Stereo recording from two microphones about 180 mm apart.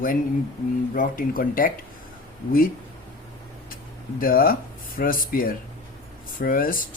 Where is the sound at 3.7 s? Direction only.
50° left (ahead or behind).